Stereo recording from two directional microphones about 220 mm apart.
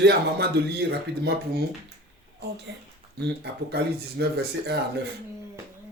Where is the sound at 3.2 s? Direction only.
50° right (ahead or behind).